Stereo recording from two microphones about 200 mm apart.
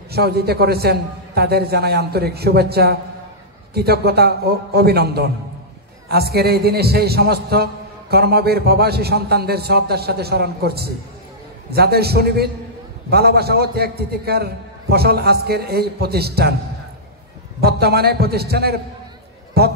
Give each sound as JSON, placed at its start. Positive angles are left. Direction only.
{"t": 0.1, "sound": "a man's voice", "side_deg": -50}
{"t": 17.6, "sound": "a man's voice", "side_deg": -55}